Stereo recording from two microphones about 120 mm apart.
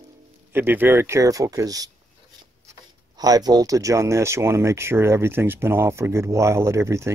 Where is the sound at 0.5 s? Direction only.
15° right (ahead or behind).